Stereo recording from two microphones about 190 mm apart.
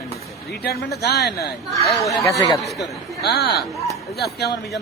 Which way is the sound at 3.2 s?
55° left (ahead or behind).